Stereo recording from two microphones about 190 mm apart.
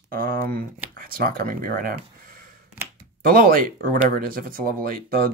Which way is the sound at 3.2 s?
50° right (ahead or behind).